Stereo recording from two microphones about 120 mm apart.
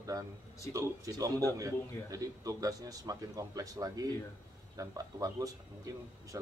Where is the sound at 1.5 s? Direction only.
30° right (ahead or behind).